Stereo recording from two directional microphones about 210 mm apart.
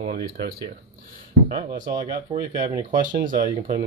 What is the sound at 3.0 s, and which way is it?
Speech, 40° right (ahead or behind).